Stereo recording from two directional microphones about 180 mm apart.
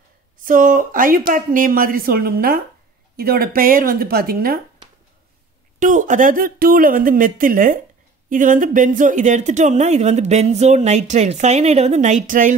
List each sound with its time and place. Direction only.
0.4 s speech: 50° right (ahead or behind)
5.8 s speech: 45° right (ahead or behind)